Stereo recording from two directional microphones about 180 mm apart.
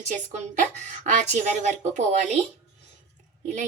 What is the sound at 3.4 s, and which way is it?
Speech, 45° right (ahead or behind).